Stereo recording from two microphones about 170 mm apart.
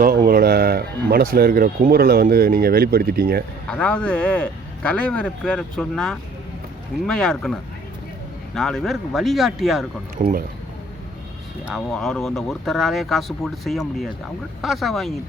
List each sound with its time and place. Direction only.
0.3 s speech: 60° right (ahead or behind)
3.7 s speech: 5° left (ahead or behind)
10.2 s speech: 45° right (ahead or behind)
11.7 s speech: centre (ahead or behind)